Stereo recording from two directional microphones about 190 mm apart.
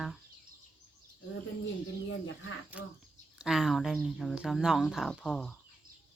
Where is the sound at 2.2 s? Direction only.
90° left.